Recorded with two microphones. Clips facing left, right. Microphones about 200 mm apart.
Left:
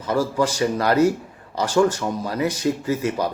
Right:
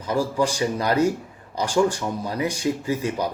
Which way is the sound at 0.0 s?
10° right (ahead or behind).